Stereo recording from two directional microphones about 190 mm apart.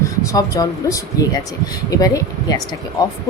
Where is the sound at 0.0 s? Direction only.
15° left (ahead or behind).